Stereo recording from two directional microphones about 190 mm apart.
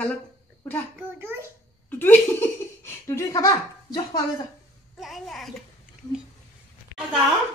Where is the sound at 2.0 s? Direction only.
10° left (ahead or behind).